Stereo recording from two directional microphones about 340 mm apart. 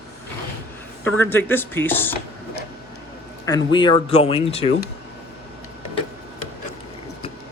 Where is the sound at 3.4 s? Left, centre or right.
Centre.